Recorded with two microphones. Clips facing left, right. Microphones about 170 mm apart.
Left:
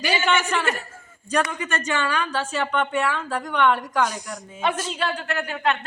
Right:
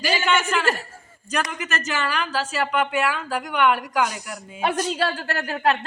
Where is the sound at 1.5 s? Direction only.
5° right (ahead or behind).